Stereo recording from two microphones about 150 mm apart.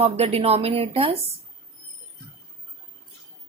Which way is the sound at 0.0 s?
40° right (ahead or behind).